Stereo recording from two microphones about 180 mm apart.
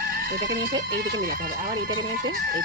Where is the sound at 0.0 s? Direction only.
55° right (ahead or behind).